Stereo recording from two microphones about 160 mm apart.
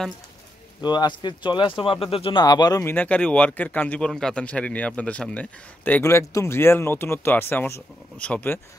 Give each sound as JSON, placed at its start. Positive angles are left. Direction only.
{"t": 0.7, "sound": "speech", "side_deg": 25}
{"t": 2.8, "sound": "a man's voice", "side_deg": 10}